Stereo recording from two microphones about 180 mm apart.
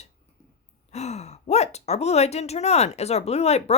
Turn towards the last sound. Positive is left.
turn(degrees=35)  # may be behind; listen again after turning